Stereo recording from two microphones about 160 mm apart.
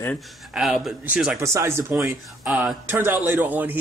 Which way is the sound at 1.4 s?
20° right (ahead or behind).